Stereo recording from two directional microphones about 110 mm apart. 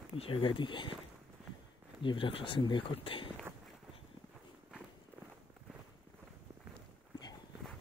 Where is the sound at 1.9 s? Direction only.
50° left (ahead or behind).